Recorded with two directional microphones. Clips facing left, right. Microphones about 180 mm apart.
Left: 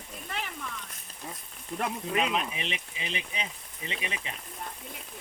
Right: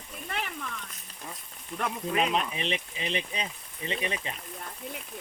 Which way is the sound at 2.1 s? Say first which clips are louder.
Right 2 dB; 40° right (ahead or behind).